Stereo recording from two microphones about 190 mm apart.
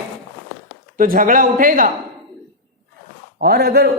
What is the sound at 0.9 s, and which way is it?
Speech, 45° right (ahead or behind).